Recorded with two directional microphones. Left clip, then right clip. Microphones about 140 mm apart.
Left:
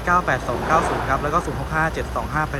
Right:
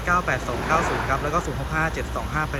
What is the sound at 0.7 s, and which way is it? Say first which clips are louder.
Speech: left 3 dB; 90° left.